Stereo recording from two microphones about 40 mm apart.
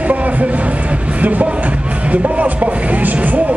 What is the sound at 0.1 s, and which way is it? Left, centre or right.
Music, right.